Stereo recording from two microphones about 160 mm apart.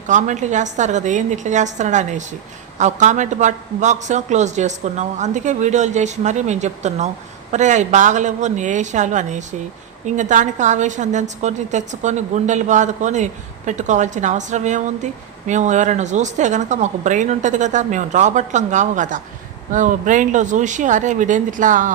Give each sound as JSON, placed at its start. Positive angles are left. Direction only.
{"t": 0.1, "sound": "a woman's voice", "side_deg": -50}